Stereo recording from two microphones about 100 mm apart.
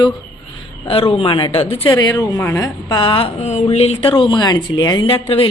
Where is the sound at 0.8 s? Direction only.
70° left (ahead or behind).